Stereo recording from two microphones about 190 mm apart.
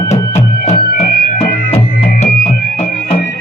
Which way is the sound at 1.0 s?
55° left (ahead or behind).